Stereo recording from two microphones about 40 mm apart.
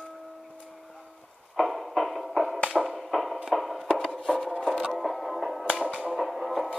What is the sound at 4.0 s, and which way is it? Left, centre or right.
Music, centre.